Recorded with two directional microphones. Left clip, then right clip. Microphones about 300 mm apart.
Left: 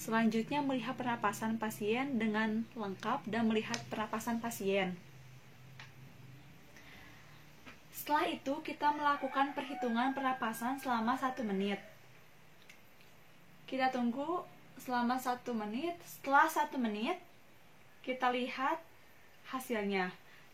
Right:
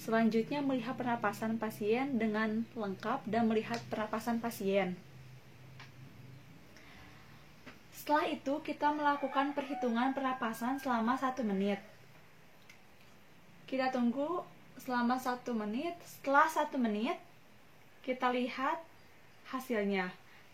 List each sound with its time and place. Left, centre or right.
0.0 s a woman's voice: left
8.0 s a woman's voice: left
13.7 s a woman's voice: left